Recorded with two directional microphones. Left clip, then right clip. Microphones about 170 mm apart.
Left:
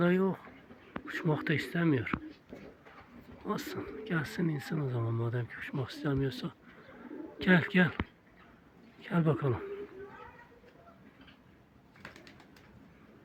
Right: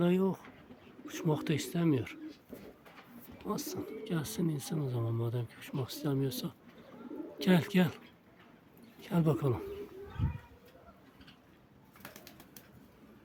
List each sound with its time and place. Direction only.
0.0 s speech: 15° right (ahead or behind)
3.5 s speech: 15° right (ahead or behind)
9.0 s speech: 15° right (ahead or behind)
12.0 s bird: 75° right (ahead or behind)